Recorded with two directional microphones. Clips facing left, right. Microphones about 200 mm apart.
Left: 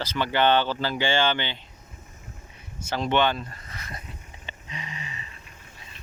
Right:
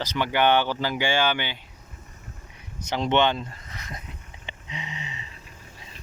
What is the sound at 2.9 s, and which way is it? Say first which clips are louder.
Speech: right 1 dB; 20° right (ahead or behind).